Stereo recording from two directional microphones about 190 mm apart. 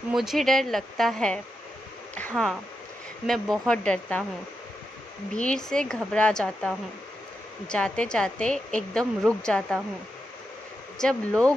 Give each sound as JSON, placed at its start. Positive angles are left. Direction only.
{"t": 0.1, "sound": "speech", "side_deg": 0}
{"t": 5.3, "sound": "speech", "side_deg": 5}
{"t": 11.0, "sound": "speech", "side_deg": 5}